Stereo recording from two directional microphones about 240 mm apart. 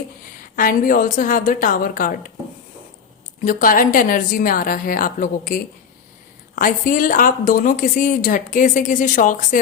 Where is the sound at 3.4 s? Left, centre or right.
Left.